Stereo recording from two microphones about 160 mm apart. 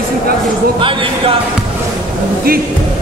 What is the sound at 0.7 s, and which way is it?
Speech, 30° right (ahead or behind).